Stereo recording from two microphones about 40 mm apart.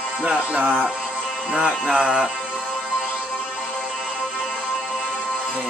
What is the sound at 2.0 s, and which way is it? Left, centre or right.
Music, centre.